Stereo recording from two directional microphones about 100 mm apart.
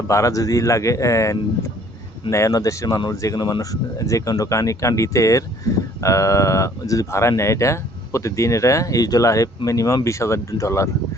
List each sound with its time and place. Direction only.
0.1 s speech: 30° left (ahead or behind)